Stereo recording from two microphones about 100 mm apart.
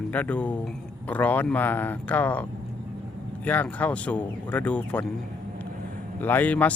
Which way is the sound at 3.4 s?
15° left (ahead or behind).